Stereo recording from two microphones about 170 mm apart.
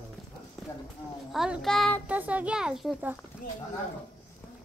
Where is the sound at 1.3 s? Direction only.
Centre (ahead or behind).